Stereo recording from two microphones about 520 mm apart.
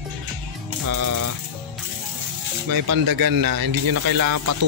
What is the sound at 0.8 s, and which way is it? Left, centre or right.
Speech, right.